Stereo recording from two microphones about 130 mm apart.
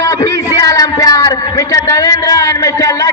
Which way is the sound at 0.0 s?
25° left (ahead or behind).